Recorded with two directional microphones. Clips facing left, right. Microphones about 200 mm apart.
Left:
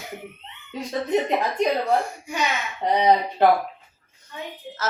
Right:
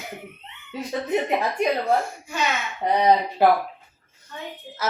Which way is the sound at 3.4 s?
10° right (ahead or behind).